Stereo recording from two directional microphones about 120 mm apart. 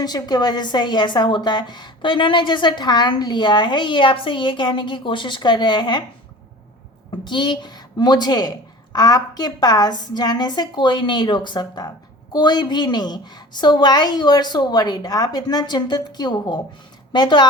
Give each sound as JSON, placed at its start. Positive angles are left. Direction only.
{"t": 0.0, "sound": "a woman's voice", "side_deg": 35}
{"t": 7.3, "sound": "a woman's voice", "side_deg": 40}